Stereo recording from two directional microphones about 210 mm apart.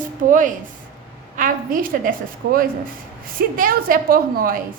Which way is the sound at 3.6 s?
40° right (ahead or behind).